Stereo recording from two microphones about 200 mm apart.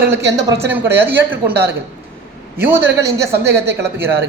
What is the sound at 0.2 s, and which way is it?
Speech, 60° right (ahead or behind).